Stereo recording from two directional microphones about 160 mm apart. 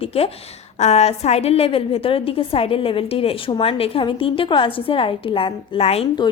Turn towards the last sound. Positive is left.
turn(degrees=40)  # may be behind; listen again after turning